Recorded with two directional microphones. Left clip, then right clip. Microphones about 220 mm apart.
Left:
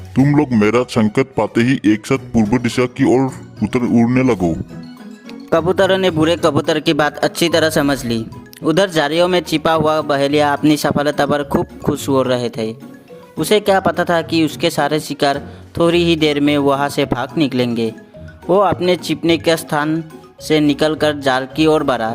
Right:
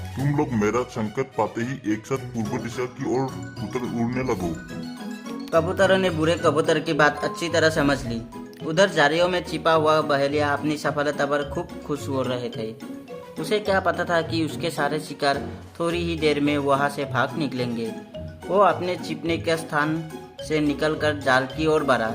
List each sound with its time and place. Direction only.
0.3 s a man's voice: 55° left (ahead or behind)
5.5 s speech: 40° left (ahead or behind)